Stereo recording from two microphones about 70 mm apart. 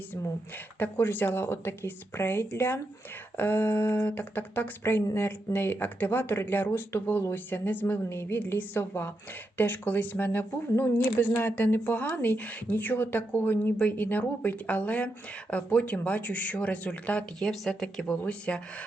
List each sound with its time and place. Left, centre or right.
0.8 s speech: left
17.4 s speech: centre
18.3 s speech: centre